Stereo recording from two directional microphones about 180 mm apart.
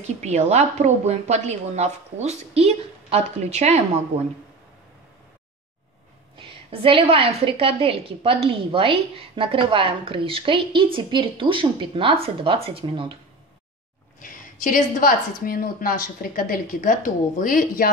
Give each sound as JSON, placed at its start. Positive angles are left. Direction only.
{"t": 0.0, "sound": "a woman's voice", "side_deg": -40}
{"t": 6.3, "sound": "a woman's voice", "side_deg": -30}
{"t": 14.2, "sound": "a woman's voice", "side_deg": 50}